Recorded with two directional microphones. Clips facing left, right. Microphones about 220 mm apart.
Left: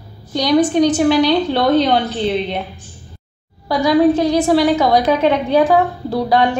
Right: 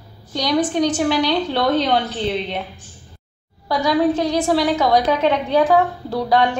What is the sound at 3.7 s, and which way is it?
A woman's voice, 10° left (ahead or behind).